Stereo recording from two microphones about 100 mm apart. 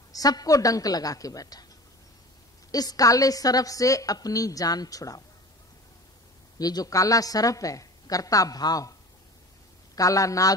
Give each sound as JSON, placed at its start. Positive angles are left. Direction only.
{"t": 0.1, "sound": "a woman's voice", "side_deg": 40}
{"t": 2.7, "sound": "a woman's voice", "side_deg": 40}
{"t": 6.6, "sound": "a woman's voice", "side_deg": 40}
{"t": 9.9, "sound": "a woman's voice", "side_deg": 35}